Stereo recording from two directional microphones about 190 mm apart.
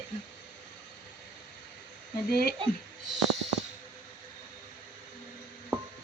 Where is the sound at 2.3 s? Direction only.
55° left (ahead or behind).